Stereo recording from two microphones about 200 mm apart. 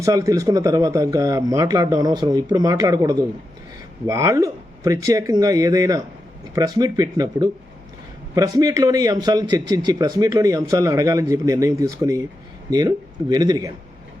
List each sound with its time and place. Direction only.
0.0 s a man's voice: 15° right (ahead or behind)
13.3 s speech: 20° right (ahead or behind)